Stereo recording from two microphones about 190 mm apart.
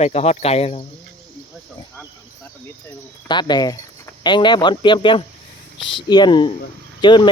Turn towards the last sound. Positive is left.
turn(degrees=25)  # may be behind; listen again after turning